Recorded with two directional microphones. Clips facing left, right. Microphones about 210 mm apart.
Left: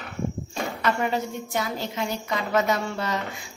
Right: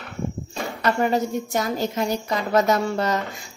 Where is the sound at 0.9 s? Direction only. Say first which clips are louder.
Right 5 dB; 40° right (ahead or behind).